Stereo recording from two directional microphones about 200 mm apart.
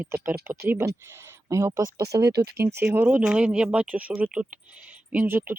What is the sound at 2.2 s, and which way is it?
Speech, 55° right (ahead or behind).